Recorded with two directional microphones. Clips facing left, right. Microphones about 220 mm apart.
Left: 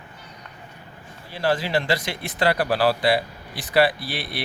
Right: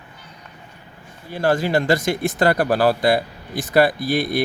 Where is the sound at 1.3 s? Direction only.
45° right (ahead or behind).